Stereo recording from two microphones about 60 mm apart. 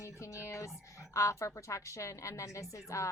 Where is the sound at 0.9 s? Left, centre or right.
Left.